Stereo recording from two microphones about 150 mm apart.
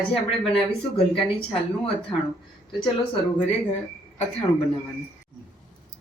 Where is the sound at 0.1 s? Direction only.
40° left (ahead or behind).